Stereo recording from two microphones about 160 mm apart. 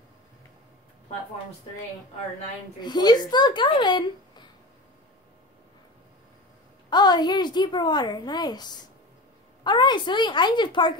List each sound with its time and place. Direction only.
2.8 s a woman's voice: 25° left (ahead or behind)
6.9 s a woman's voice: 25° left (ahead or behind)